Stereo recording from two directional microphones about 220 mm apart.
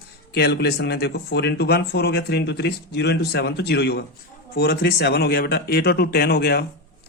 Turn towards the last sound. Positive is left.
turn(degrees=45)  # may be behind; listen again after turning